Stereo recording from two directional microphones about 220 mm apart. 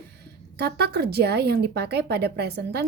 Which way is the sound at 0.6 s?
45° right (ahead or behind).